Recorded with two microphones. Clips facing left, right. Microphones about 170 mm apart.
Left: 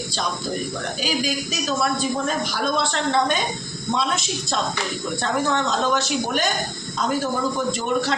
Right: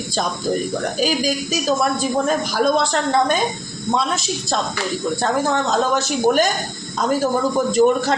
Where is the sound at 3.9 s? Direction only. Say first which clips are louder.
Right 3 dB; 40° right (ahead or behind).